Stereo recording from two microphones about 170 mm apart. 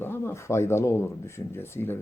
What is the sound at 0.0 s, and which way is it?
Speech, 15° left (ahead or behind).